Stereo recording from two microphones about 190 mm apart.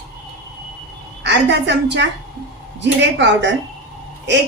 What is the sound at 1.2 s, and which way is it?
A woman's voice, 65° right (ahead or behind).